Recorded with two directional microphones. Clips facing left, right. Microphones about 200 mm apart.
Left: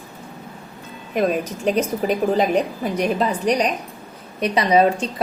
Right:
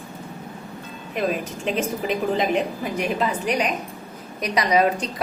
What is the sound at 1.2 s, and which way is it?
A woman's voice, 40° left (ahead or behind).